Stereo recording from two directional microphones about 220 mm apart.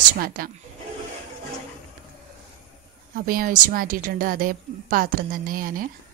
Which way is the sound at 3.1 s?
40° right (ahead or behind).